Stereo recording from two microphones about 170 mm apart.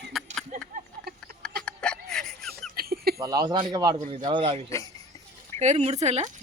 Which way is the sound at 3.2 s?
20° right (ahead or behind).